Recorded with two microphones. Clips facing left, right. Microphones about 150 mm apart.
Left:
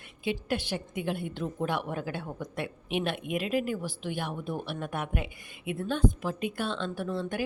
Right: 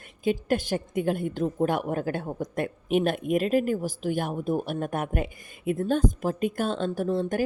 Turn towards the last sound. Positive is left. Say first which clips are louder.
# right 6 dB
turn(degrees=-45)  # may be behind; listen again after turning